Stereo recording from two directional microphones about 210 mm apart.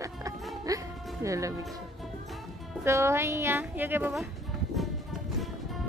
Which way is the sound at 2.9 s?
15° right (ahead or behind).